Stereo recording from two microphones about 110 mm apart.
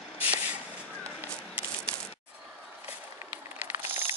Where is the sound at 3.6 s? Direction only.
20° right (ahead or behind).